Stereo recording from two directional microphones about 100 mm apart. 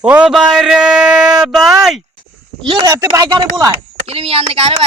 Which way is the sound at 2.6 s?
55° right (ahead or behind).